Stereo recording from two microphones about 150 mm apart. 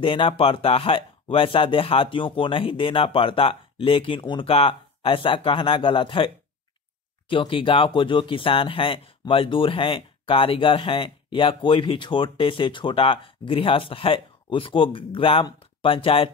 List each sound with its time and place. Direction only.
0.0 s speech: 35° left (ahead or behind)